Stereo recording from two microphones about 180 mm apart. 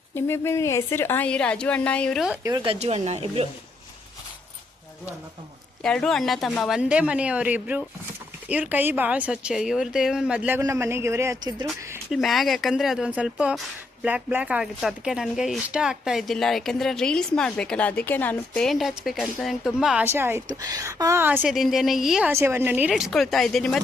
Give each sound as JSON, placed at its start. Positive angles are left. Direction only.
{"t": 0.1, "sound": "a woman's voice", "side_deg": 15}
{"t": 2.6, "sound": "speech", "side_deg": -35}
{"t": 5.8, "sound": "speech", "side_deg": 5}
{"t": 12.1, "sound": "speech", "side_deg": 0}
{"t": 22.3, "sound": "speech", "side_deg": -15}